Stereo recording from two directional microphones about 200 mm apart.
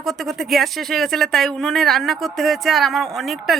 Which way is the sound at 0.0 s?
Centre (ahead or behind).